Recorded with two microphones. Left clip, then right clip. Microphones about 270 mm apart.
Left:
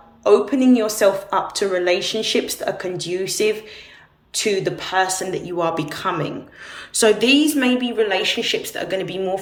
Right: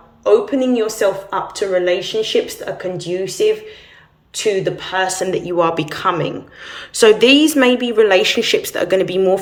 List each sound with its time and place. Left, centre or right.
0.3 s a woman's voice: centre